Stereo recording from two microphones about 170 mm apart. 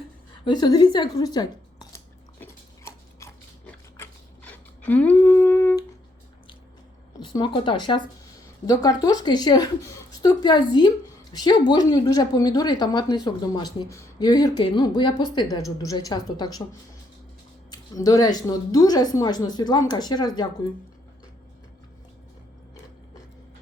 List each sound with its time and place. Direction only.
0.4 s speech: 25° left (ahead or behind)
2.4 s dog: 15° left (ahead or behind)
3.9 s a sound: 10° left (ahead or behind)
7.2 s a woman's voice: 30° left (ahead or behind)
17.7 s a woman's voice: 20° left (ahead or behind)